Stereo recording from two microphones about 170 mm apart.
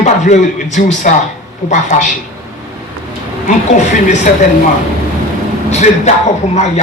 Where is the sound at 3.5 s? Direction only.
45° left (ahead or behind).